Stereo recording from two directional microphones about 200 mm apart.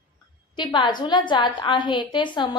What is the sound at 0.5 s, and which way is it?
A woman's voice, 25° left (ahead or behind).